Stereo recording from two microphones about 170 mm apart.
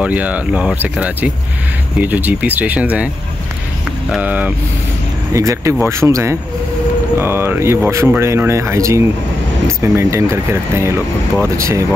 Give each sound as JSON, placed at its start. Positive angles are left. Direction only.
{"t": 0.0, "sound": "speech", "side_deg": -10}
{"t": 4.1, "sound": "speech", "side_deg": -10}